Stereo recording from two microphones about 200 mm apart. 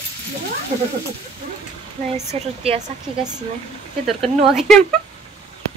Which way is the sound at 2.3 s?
30° right (ahead or behind).